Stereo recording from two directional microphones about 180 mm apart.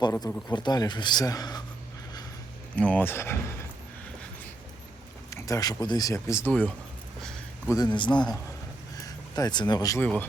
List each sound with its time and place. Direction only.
0.0 s speech: 20° left (ahead or behind)
2.7 s speech: 10° left (ahead or behind)
5.3 s speech: 20° left (ahead or behind)
7.7 s speech: 25° left (ahead or behind)